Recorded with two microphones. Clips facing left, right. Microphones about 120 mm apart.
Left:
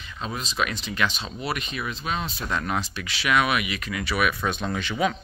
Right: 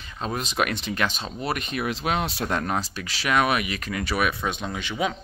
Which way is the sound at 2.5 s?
40° right (ahead or behind).